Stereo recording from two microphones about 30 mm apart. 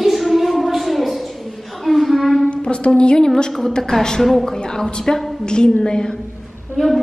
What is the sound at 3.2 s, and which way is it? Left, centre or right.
A woman's voice, centre.